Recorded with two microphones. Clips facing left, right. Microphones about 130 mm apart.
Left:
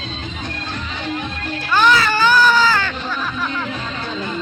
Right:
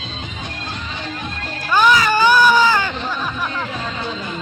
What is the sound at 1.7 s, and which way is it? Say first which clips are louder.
Music: right 1 dB; 10° right (ahead or behind).